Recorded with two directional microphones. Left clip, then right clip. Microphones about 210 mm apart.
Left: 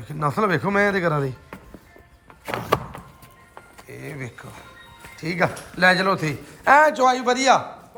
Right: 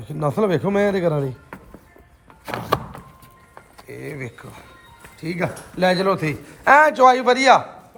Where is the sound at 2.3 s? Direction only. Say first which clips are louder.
Even; centre (ahead or behind).